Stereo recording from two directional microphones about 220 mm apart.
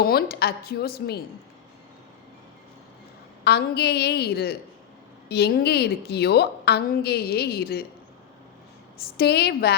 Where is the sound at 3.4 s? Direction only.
50° left (ahead or behind).